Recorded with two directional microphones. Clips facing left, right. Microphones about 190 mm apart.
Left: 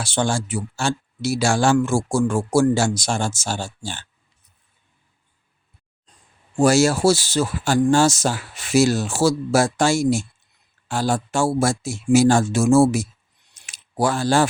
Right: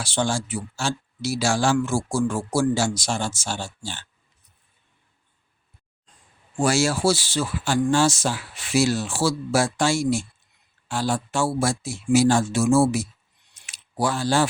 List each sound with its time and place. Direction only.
0.0 s speech: 50° left (ahead or behind)
6.6 s speech: 40° left (ahead or behind)
13.5 s a sound: 45° left (ahead or behind)